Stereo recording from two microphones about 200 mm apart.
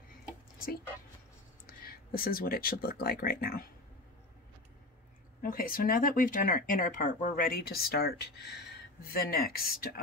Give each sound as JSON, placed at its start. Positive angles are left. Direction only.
{"t": 1.7, "sound": "speech", "side_deg": 50}
{"t": 5.4, "sound": "speech", "side_deg": 45}